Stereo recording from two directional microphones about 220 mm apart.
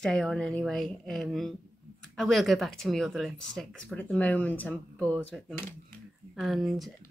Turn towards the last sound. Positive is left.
turn(degrees=0)  # may be behind; listen again after turning